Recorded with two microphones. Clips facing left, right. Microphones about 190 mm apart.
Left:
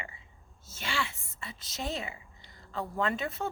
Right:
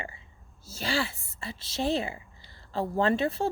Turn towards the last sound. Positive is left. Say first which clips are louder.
# right 6 dB
turn(degrees=-30)  # may be behind; listen again after turning